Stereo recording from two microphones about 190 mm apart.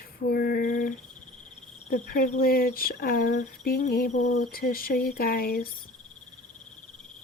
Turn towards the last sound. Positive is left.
turn(degrees=50)  # may be behind; listen again after turning